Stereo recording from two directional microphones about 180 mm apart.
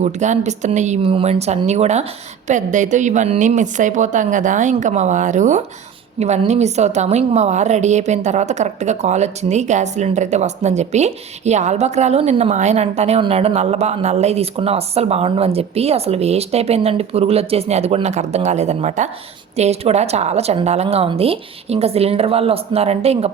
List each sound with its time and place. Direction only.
0.0 s a woman's voice: 40° right (ahead or behind)